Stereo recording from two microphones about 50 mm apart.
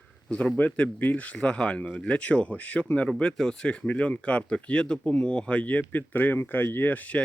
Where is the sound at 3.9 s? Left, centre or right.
Left.